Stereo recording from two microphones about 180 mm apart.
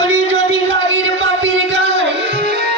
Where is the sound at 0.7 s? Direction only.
90° right.